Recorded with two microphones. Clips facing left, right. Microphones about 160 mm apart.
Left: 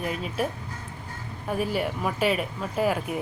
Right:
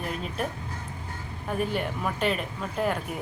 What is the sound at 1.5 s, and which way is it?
Speech, 5° left (ahead or behind).